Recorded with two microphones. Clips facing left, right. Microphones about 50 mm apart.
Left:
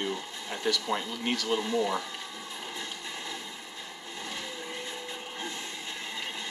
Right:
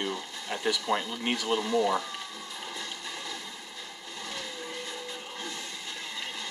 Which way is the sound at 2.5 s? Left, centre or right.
Left.